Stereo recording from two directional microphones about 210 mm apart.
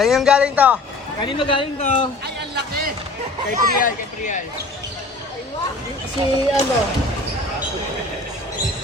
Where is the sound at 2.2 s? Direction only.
50° right (ahead or behind).